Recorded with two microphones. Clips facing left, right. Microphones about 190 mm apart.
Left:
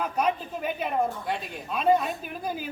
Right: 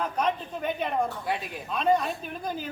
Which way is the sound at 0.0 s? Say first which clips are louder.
Left 1 dB; 10° left (ahead or behind).